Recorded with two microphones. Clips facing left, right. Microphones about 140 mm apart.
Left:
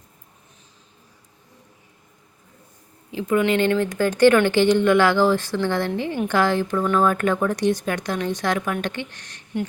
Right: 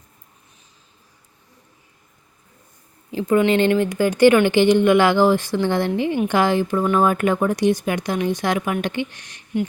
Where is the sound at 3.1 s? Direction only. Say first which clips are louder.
Right 3 dB; 35° right (ahead or behind).